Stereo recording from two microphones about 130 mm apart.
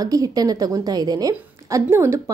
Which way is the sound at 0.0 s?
30° right (ahead or behind).